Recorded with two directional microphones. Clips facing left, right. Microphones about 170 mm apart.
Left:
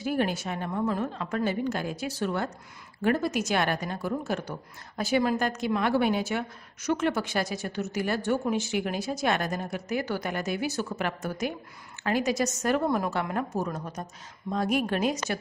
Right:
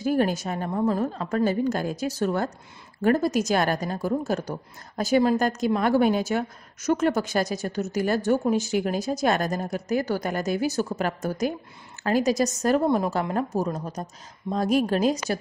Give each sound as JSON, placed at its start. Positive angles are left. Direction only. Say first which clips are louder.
{"t": 0.0, "sound": "a woman's voice", "louder": "right 5 dB", "side_deg": -40}